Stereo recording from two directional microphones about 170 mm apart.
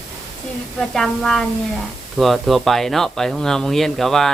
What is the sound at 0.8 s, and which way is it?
Speech, centre (ahead or behind).